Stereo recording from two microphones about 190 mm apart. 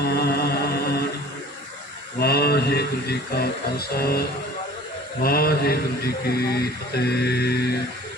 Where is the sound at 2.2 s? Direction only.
55° left (ahead or behind).